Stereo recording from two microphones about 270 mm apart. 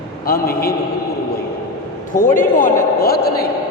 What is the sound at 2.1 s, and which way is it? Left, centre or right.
A man's voice, left.